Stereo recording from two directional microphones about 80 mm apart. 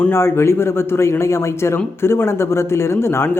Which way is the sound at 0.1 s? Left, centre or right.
Left.